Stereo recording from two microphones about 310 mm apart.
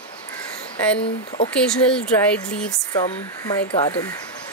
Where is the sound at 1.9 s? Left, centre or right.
Centre.